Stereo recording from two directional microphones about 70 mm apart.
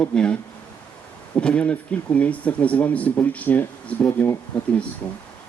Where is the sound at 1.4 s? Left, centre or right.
Centre.